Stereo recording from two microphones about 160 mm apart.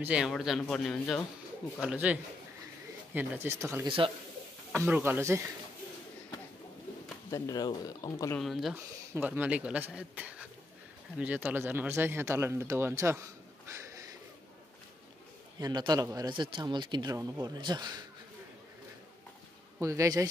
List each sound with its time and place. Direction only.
0.0 s speech: 5° right (ahead or behind)
1.8 s speech: 5° right (ahead or behind)
3.2 s speech: 15° right (ahead or behind)
3.8 s speech: 35° right (ahead or behind)
4.7 s speech: 10° right (ahead or behind)
7.2 s speech: 20° left (ahead or behind)
8.4 s speech: centre (ahead or behind)
8.7 s speech: 15° right (ahead or behind)
15.6 s speech: 25° right (ahead or behind)
19.8 s speech: 20° right (ahead or behind)